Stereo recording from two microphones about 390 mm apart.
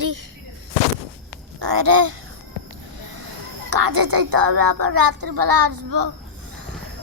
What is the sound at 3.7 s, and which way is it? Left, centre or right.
A woman's voice, right.